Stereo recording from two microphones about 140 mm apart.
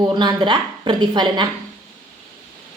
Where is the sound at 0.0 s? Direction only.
30° right (ahead or behind).